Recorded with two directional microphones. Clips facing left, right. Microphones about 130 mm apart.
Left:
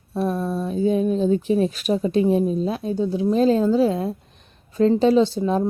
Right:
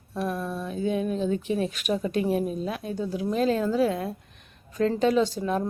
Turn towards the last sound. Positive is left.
turn(degrees=30)  # may be behind; listen again after turning